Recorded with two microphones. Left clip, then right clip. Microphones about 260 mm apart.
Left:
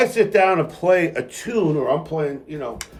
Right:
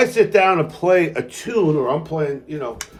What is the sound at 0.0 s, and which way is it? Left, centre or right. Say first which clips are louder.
Speech: right 2 dB; centre.